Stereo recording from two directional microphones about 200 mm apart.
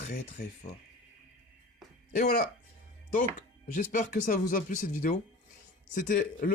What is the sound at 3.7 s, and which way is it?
Speech, 45° left (ahead or behind).